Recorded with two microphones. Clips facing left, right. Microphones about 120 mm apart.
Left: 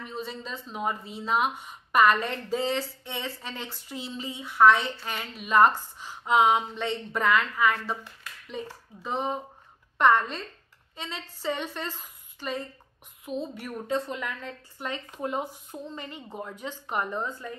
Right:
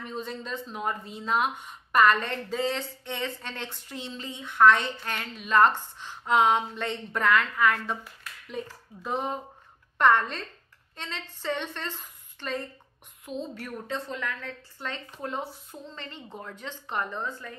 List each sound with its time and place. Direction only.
0.0 s a woman's voice: 5° left (ahead or behind); by 17.6 s 20° left (ahead or behind)